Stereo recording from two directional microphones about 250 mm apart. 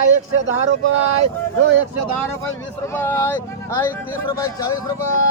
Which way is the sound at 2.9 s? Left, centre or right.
Centre.